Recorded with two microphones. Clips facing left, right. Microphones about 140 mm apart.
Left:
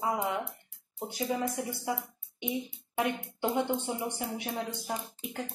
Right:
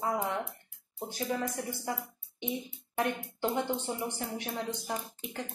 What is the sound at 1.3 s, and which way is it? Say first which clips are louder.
Speech: left 2 dB; 10° left (ahead or behind).